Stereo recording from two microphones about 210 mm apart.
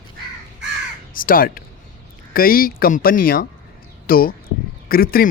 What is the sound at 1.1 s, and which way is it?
Speech, 45° left (ahead or behind).